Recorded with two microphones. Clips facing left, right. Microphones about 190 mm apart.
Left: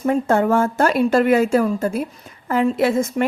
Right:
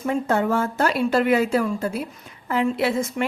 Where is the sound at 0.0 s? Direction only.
45° left (ahead or behind).